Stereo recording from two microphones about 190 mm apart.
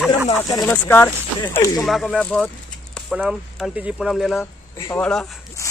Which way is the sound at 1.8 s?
Centre (ahead or behind).